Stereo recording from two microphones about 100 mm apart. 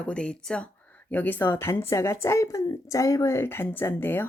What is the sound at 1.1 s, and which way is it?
Speech, 20° left (ahead or behind).